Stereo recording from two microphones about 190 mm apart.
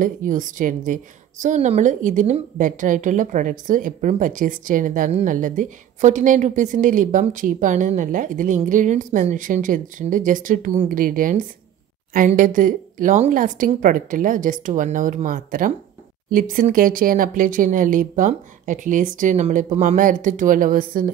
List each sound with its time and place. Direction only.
0.0 s a woman's voice: 45° right (ahead or behind)